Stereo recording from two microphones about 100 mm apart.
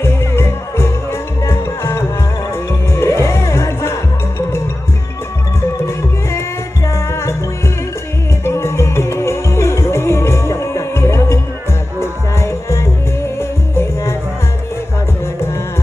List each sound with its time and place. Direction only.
0.0 s music: 25° left (ahead or behind)
6.9 s music: 25° left (ahead or behind)
8.5 s music: 25° left (ahead or behind)